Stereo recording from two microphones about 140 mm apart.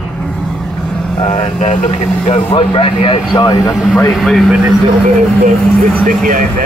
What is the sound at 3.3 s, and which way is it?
Speech, 25° left (ahead or behind).